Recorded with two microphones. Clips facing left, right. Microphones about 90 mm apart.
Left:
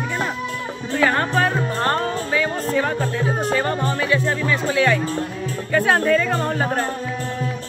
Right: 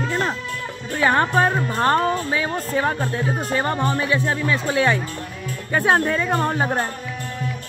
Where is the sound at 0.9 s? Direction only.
20° right (ahead or behind).